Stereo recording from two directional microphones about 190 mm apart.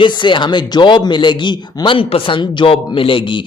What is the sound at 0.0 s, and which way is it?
A man's voice, 25° left (ahead or behind).